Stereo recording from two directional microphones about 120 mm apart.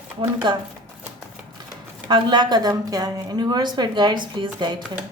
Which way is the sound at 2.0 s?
40° right (ahead or behind).